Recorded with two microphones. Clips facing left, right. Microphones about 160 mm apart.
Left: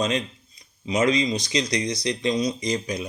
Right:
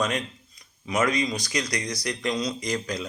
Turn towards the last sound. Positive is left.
turn(degrees=20)  # may be behind; listen again after turning